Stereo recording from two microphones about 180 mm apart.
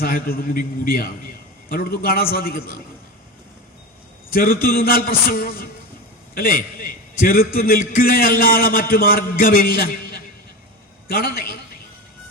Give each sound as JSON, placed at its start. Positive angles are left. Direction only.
{"t": 0.0, "sound": "a man's voice", "side_deg": 55}
{"t": 4.4, "sound": "a man's voice", "side_deg": 55}